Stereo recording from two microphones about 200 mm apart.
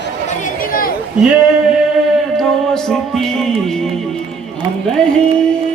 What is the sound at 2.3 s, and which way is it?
Music, centre (ahead or behind).